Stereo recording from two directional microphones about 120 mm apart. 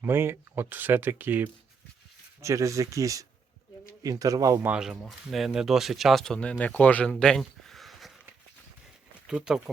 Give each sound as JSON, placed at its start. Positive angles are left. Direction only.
{"t": 0.0, "sound": "speech", "side_deg": -20}
{"t": 2.4, "sound": "speech", "side_deg": -25}
{"t": 4.6, "sound": "speech", "side_deg": -5}
{"t": 9.2, "sound": "speech", "side_deg": -5}